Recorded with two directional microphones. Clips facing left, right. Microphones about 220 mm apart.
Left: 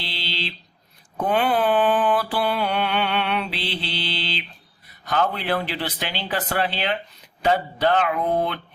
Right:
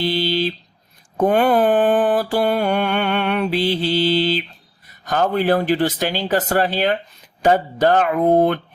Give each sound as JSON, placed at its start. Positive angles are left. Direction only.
{"t": 0.0, "sound": "mantra", "side_deg": -45}